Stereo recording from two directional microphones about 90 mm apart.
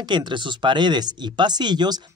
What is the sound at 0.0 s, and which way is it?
Speech, 55° right (ahead or behind).